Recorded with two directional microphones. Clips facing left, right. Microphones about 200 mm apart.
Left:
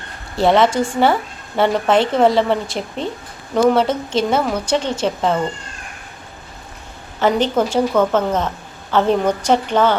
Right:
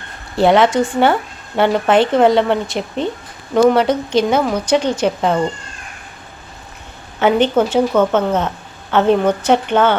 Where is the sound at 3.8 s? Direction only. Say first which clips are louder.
Right 4 dB; 25° left (ahead or behind).